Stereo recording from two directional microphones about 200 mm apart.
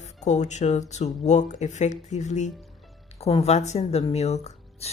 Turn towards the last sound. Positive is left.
turn(degrees=35)  # may be behind; listen again after turning